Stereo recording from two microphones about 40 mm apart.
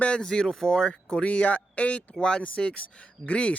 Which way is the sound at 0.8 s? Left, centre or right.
Centre.